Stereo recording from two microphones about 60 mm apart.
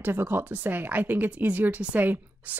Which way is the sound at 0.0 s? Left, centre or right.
Right.